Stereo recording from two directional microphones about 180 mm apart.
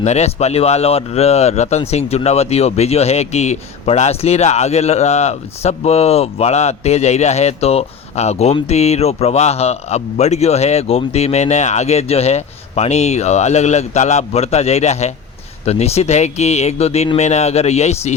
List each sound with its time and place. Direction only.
0.0 s speech: 40° left (ahead or behind)